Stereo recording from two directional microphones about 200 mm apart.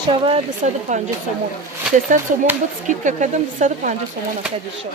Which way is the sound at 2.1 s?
40° right (ahead or behind).